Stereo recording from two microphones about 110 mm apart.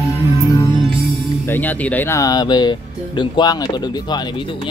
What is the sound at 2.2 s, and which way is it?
Speech, 35° left (ahead or behind).